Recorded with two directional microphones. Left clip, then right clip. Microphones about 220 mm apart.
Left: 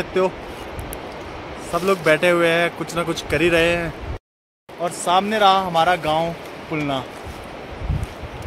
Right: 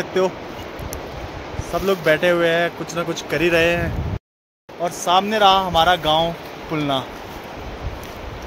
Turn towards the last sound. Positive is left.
turn(degrees=-15)  # may be behind; listen again after turning